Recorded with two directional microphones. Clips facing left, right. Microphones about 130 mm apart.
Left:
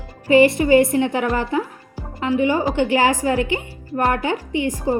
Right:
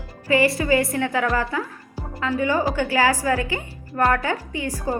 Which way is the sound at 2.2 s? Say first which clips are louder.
Left 3 dB; 20° left (ahead or behind).